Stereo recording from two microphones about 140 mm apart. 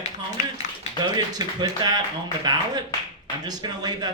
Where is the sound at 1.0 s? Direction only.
30° right (ahead or behind).